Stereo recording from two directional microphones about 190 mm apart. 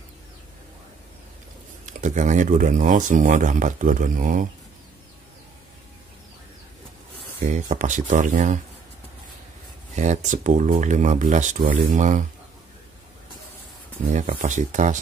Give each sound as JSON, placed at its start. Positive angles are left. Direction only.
{"t": 1.9, "sound": "speech", "side_deg": -40}
{"t": 7.4, "sound": "speech", "side_deg": -40}
{"t": 9.9, "sound": "speech", "side_deg": -40}
{"t": 14.1, "sound": "speech", "side_deg": -40}